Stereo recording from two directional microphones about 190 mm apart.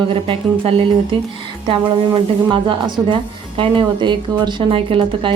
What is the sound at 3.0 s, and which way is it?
A woman's voice, 25° right (ahead or behind).